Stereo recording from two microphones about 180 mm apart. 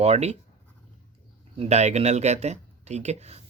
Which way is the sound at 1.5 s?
35° right (ahead or behind).